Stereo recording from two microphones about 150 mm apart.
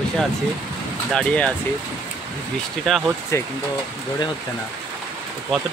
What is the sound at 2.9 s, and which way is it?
Speech, centre (ahead or behind).